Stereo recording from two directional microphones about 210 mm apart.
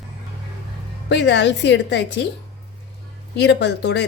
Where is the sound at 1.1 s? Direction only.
55° left (ahead or behind).